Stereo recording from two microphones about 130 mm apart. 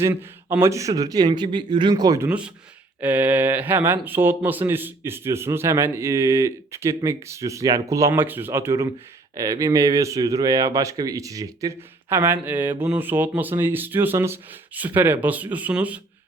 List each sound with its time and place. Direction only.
0.0 s speech: 15° right (ahead or behind)
2.2 s speech: 10° right (ahead or behind)